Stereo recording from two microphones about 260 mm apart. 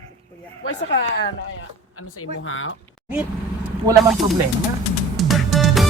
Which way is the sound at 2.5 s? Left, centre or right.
Left.